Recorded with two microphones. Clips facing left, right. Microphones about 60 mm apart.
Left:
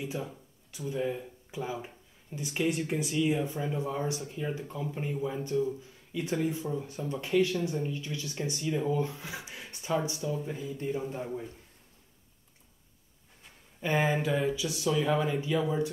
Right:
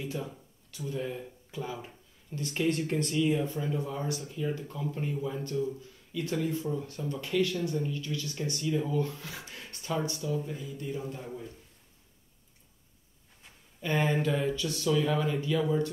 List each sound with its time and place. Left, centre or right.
0.0 s speech: centre
13.7 s speech: centre